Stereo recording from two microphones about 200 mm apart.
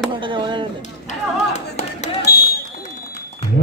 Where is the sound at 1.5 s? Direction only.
35° left (ahead or behind).